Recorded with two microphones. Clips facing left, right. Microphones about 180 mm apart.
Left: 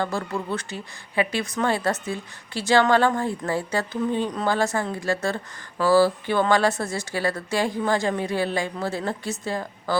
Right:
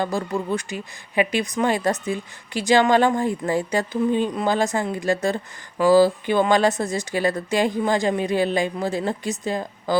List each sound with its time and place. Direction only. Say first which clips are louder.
0.0 s speech: right 3 dB; 15° right (ahead or behind)